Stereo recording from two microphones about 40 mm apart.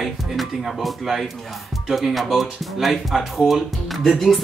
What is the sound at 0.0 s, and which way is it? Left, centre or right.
Music, centre.